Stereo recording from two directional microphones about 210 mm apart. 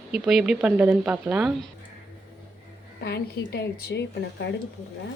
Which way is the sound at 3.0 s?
50° left (ahead or behind).